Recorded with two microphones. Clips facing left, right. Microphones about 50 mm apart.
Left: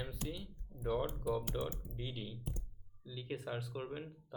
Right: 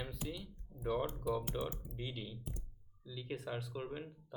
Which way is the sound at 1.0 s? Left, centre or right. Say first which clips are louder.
Even; centre.